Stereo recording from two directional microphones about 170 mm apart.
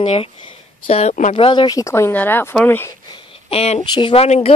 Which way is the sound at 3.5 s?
35° left (ahead or behind).